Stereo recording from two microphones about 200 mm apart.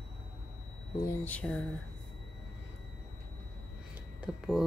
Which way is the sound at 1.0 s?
10° left (ahead or behind).